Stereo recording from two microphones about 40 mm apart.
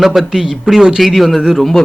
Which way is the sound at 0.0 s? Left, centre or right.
Centre.